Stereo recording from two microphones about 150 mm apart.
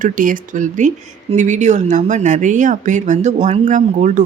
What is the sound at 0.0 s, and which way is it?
Speech, 65° right (ahead or behind).